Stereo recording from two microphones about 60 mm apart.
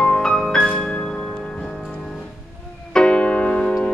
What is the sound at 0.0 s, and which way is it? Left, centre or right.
Music, centre.